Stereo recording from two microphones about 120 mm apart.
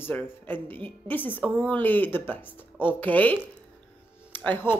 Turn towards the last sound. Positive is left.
turn(degrees=15)  # may be behind; listen again after turning